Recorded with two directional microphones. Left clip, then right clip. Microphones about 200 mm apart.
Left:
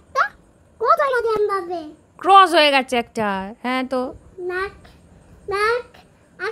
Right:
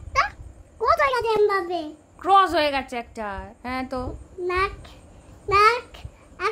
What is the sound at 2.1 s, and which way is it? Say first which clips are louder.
A woman's voice: left 6 dB; 30° left (ahead or behind).